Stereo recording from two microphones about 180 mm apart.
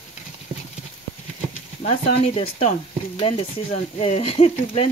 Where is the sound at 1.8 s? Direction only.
30° left (ahead or behind).